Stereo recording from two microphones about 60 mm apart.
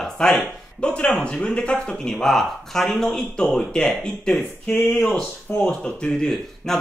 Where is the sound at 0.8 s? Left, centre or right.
Centre.